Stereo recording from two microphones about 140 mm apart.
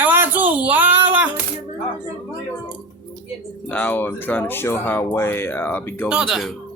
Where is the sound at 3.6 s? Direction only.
10° left (ahead or behind).